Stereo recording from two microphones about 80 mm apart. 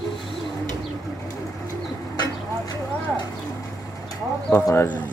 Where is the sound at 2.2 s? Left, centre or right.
Left.